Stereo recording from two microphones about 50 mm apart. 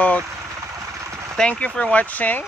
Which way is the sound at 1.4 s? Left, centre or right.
Centre.